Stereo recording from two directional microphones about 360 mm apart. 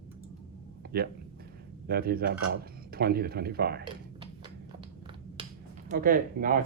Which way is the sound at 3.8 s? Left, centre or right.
Centre.